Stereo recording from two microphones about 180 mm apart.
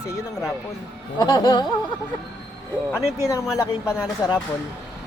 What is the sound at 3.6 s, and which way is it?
Speech, 15° left (ahead or behind).